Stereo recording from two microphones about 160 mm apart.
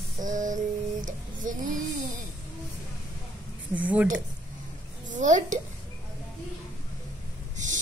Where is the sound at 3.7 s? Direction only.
10° right (ahead or behind).